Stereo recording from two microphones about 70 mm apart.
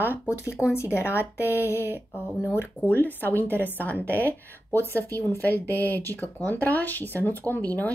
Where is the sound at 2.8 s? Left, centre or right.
Left.